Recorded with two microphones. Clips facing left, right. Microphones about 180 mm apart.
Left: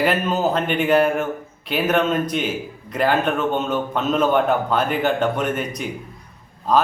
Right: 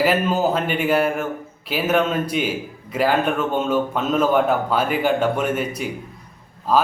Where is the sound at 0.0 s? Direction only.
5° right (ahead or behind).